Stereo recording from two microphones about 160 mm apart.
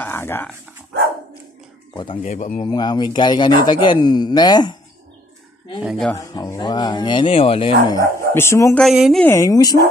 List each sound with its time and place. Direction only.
0.0 s a sound: 15° left (ahead or behind)
2.2 s speech: 50° left (ahead or behind)
2.6 s speech: 25° left (ahead or behind)
5.8 s speech: centre (ahead or behind)
6.1 s speech: 20° left (ahead or behind)
7.8 s speech: 25° left (ahead or behind)
8.7 s speech: centre (ahead or behind)
9.2 s speech: 20° left (ahead or behind)